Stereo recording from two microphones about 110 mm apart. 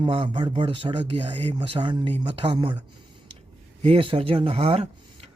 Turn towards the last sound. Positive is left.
turn(degrees=-65)  # may be behind; listen again after turning